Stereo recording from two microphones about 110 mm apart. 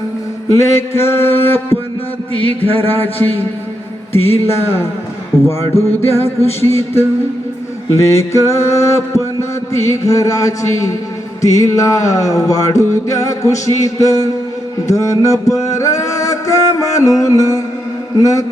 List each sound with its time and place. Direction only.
0.5 s mantra: 25° left (ahead or behind)
11.4 s music: 30° left (ahead or behind)